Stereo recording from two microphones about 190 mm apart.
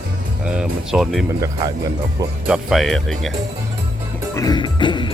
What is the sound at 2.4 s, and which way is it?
Speech, centre (ahead or behind).